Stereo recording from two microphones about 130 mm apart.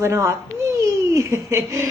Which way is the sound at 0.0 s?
20° right (ahead or behind).